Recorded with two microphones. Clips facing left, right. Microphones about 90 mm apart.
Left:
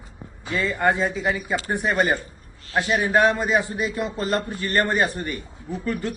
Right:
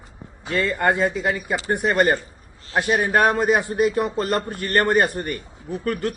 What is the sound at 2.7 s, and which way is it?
Speech, 35° right (ahead or behind).